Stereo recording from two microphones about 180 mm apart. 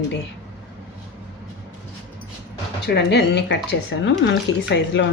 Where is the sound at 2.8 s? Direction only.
65° left (ahead or behind).